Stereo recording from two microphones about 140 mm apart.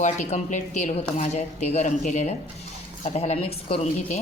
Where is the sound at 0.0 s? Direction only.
55° left (ahead or behind).